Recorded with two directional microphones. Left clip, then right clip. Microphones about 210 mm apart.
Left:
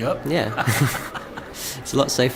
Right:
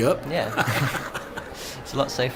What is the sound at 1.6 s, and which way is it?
Speech, 55° left (ahead or behind).